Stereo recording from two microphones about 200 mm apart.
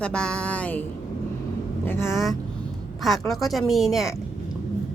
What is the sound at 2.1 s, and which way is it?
A woman's voice, centre (ahead or behind).